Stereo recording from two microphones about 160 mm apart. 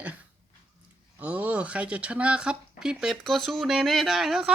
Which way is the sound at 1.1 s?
10° right (ahead or behind).